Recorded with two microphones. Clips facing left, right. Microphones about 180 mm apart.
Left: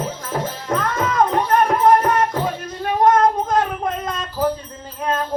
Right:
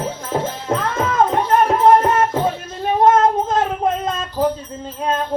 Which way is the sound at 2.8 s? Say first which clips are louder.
Right 1 dB; 25° right (ahead or behind).